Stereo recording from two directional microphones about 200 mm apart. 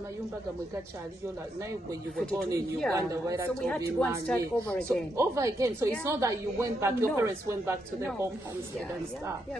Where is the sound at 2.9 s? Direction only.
15° right (ahead or behind).